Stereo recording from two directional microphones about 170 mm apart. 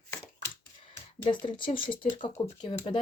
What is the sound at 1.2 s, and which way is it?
Speech, 30° left (ahead or behind).